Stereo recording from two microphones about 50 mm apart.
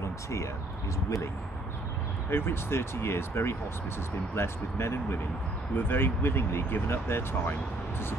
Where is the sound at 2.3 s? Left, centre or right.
Left.